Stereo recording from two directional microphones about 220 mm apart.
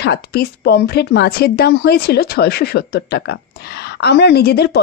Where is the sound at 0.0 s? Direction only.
45° left (ahead or behind).